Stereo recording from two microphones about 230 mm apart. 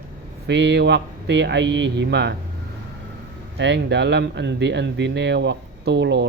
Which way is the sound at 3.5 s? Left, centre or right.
Right.